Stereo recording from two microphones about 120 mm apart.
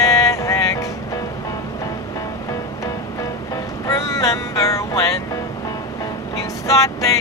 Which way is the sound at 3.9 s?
30° left (ahead or behind).